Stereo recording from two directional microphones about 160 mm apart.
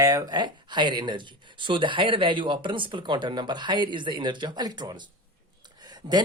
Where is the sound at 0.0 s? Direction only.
20° right (ahead or behind).